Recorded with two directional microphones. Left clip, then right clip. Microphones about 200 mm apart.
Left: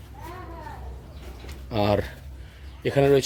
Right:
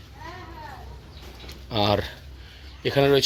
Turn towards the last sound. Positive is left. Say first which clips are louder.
# even
turn(degrees=-5)  # may be behind; listen again after turning